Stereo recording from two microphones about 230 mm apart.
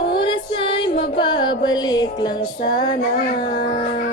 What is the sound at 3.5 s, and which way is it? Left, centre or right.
Music, left.